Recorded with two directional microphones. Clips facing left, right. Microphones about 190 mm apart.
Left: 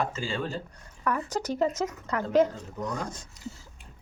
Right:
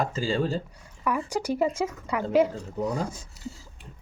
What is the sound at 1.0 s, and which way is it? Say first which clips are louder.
A woman's voice: right 2 dB; 10° right (ahead or behind).